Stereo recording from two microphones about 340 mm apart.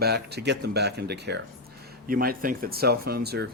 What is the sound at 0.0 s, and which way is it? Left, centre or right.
A man's voice, right.